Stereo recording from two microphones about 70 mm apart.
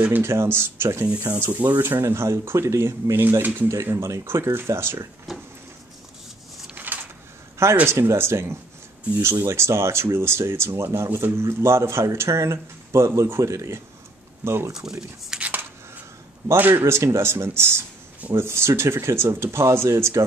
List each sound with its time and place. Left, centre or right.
0.2 s speech: right
1.4 s speech: right
3.2 s speech: right
3.6 s speech: right
5.3 s a sound: centre
6.7 s a sound: right
7.8 s speech: right
14.4 s speech: right
15.0 s speech: centre
16.7 s speech: right